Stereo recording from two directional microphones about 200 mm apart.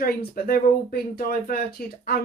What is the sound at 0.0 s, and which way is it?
A woman's voice, 45° left (ahead or behind).